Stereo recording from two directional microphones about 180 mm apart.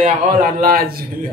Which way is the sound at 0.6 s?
55° right (ahead or behind).